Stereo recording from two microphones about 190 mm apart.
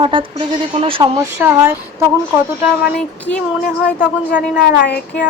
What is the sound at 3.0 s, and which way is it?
Speech, 5° left (ahead or behind).